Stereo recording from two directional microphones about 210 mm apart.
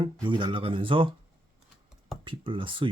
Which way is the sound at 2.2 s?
25° right (ahead or behind).